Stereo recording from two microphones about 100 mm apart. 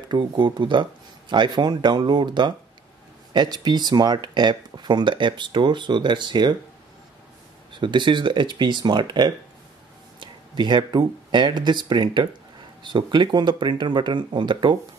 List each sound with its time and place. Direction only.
0.1 s speech: 50° right (ahead or behind)
7.7 s speech: 50° right (ahead or behind)